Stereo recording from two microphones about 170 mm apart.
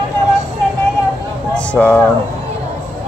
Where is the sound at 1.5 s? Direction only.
10° left (ahead or behind).